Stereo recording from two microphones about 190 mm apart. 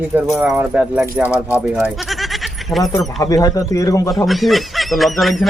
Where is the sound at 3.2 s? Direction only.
20° left (ahead or behind).